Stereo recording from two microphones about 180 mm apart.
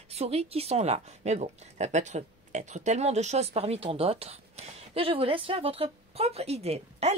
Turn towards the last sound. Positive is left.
turn(degrees=-35)  # may be behind; listen again after turning